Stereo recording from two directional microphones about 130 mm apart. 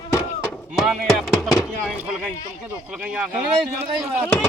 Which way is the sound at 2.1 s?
10° right (ahead or behind).